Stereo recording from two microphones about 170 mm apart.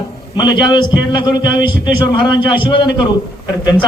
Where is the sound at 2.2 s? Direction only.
30° left (ahead or behind).